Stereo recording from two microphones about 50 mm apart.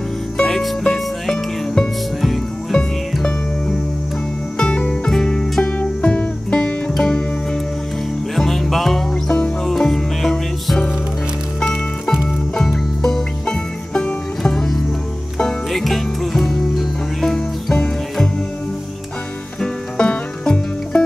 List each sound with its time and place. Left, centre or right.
0.4 s music: centre
4.6 s music: centre
5.6 s music: left
12.3 s music: centre
19.6 s music: centre